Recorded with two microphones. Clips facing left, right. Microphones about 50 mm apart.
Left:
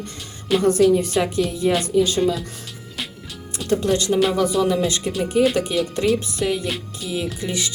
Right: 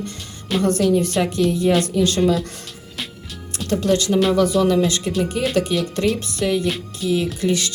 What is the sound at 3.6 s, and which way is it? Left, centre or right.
Speech, left.